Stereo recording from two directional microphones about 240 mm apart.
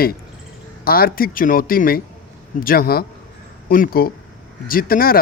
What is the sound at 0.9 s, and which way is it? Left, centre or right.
Speech, left.